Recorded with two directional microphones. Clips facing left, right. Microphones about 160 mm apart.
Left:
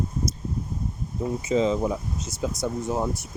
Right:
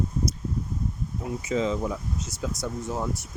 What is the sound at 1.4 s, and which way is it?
Speech, 25° left (ahead or behind).